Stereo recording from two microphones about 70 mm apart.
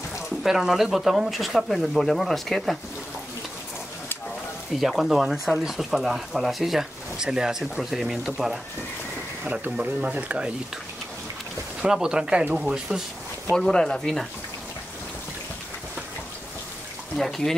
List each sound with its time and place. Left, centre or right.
0.4 s speech: centre
4.7 s speech: centre
9.4 s speech: centre
11.8 s speech: centre
13.7 s speech: centre
17.2 s speech: centre